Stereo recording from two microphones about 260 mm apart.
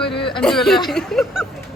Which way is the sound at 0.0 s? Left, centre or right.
Centre.